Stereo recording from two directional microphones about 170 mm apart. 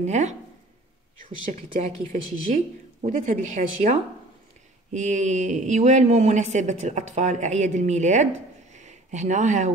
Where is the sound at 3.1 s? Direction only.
50° right (ahead or behind).